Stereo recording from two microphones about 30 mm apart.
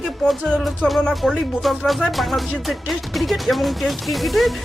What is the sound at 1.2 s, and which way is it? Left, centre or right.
Speech, centre.